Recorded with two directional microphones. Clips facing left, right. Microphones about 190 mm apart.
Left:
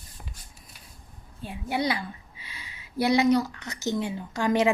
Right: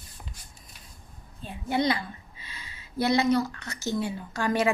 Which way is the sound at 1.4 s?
10° left (ahead or behind).